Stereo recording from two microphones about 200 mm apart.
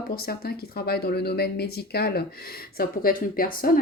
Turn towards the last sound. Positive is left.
turn(degrees=45)  # may be behind; listen again after turning